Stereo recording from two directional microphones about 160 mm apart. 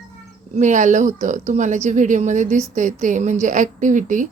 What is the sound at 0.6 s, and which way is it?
Speech, 50° right (ahead or behind).